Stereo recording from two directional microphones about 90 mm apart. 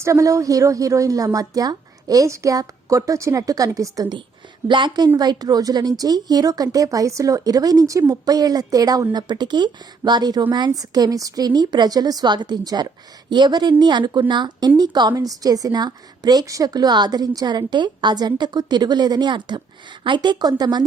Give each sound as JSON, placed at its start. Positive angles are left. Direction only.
{"t": 0.0, "sound": "a woman's voice", "side_deg": -35}
{"t": 4.7, "sound": "a woman's voice", "side_deg": -55}